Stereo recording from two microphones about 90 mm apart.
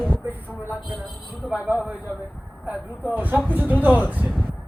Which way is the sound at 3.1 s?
20° right (ahead or behind).